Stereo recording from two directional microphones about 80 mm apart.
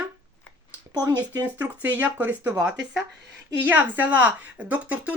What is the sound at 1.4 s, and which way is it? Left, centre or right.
A woman's voice, right.